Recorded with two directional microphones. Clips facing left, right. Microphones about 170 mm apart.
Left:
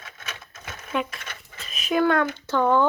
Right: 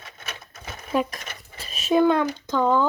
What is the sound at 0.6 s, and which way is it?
Sewing machine, 10° right (ahead or behind).